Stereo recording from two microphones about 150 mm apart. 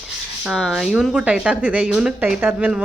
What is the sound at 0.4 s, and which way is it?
Speech, centre (ahead or behind).